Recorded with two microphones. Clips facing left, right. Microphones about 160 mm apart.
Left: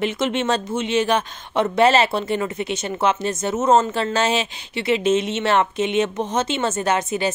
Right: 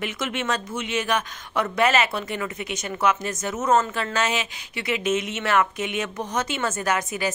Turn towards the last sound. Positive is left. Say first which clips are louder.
# left 4 dB
turn(degrees=25)  # may be behind; listen again after turning